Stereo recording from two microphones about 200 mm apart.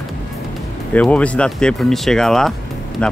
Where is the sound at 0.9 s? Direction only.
5° left (ahead or behind).